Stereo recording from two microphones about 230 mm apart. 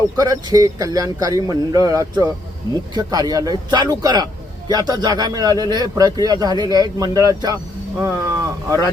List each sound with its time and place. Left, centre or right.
0.2 s a man's voice: centre